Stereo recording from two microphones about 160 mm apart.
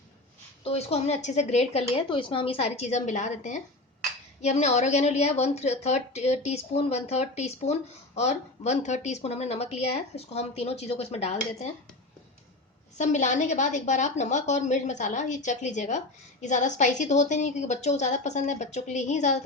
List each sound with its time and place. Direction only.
0.6 s a woman's voice: 40° left (ahead or behind)
1.9 s a woman's voice: 35° left (ahead or behind)
13.0 s a woman's voice: 50° left (ahead or behind)